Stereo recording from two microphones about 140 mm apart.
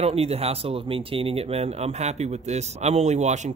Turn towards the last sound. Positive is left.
turn(degrees=-55)  # may be behind; listen again after turning